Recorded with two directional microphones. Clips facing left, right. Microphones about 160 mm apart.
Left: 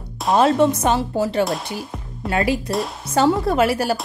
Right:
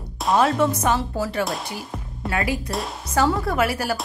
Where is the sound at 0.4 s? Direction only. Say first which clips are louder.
Left 5 dB; 25° left (ahead or behind).